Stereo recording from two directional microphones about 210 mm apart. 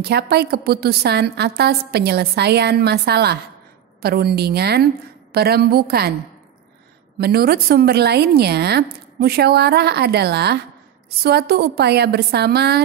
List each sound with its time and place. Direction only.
0.0 s a woman's voice: 50° right (ahead or behind)
7.2 s a woman's voice: 45° right (ahead or behind)